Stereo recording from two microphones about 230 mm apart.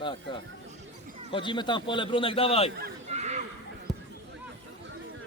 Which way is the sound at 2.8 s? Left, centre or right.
Right.